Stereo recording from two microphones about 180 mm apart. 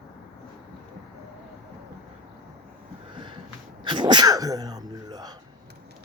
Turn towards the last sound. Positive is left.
turn(degrees=-20)  # may be behind; listen again after turning